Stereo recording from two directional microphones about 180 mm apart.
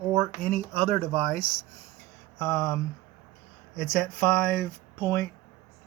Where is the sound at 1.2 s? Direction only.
Centre (ahead or behind).